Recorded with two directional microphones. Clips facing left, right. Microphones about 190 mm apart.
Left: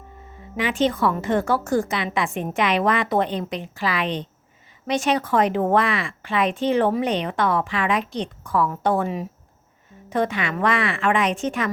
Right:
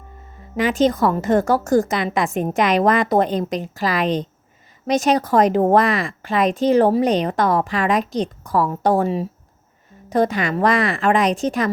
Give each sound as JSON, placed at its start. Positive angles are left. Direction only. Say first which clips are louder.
{"t": 0.5, "sound": "speech", "louder": "right 4 dB", "side_deg": -40}